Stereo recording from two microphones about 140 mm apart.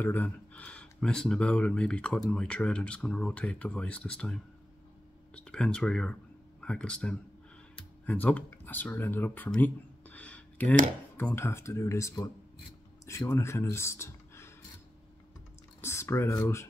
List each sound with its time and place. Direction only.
0.0 s speech: 15° left (ahead or behind)
15.8 s speech: 20° left (ahead or behind)